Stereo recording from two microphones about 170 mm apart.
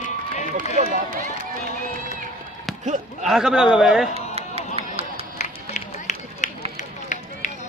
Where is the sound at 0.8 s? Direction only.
55° right (ahead or behind).